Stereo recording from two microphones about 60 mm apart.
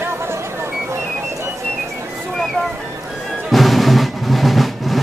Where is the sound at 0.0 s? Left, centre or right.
Right.